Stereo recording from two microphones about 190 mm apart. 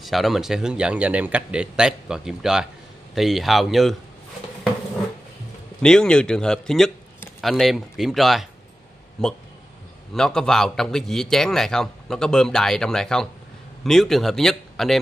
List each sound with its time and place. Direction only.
0.0 s a man's voice: centre (ahead or behind)
5.8 s a man's voice: 5° left (ahead or behind)